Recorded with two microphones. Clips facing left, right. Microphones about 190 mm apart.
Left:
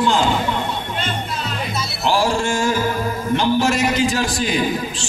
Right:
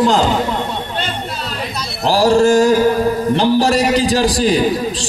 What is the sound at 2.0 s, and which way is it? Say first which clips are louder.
A man's voice: right 8 dB; 35° right (ahead or behind).